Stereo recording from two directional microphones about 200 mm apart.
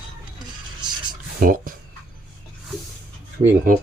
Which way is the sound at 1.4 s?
45° right (ahead or behind).